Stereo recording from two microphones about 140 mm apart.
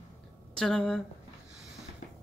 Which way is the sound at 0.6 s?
5° left (ahead or behind).